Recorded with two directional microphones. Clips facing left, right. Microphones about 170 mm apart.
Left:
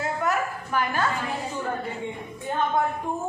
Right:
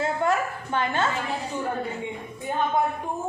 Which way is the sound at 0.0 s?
25° right (ahead or behind).